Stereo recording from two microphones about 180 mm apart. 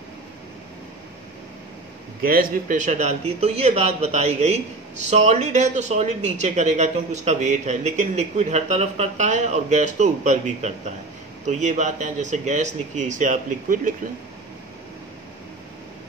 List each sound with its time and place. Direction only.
2.2 s speech: 50° right (ahead or behind)